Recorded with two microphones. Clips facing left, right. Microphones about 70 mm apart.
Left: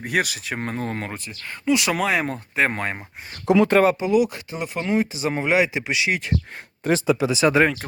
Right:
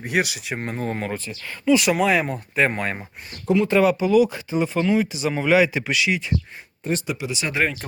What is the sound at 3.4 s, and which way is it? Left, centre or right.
Speech, left.